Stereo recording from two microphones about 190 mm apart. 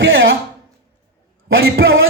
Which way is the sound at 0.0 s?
90° right.